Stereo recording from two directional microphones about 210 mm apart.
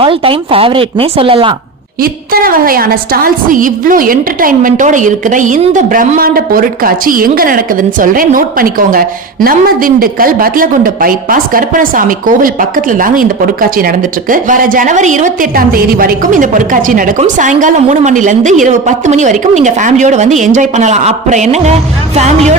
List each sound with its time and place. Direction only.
0.0 s speech: 25° right (ahead or behind)
2.0 s a woman's voice: 45° right (ahead or behind)